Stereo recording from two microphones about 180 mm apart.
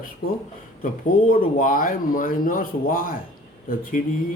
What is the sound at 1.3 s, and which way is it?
Speech, 50° left (ahead or behind).